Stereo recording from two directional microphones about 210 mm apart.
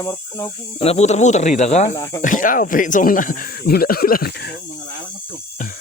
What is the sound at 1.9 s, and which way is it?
Speech, 15° left (ahead or behind).